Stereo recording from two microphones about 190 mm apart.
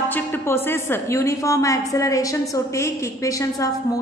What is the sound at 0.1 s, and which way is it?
A woman's voice, 10° left (ahead or behind).